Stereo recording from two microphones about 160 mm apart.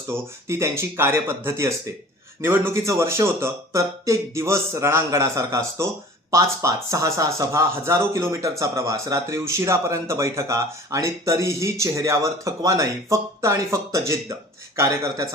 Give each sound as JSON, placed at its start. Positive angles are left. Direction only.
{"t": 0.1, "sound": "speech", "side_deg": -15}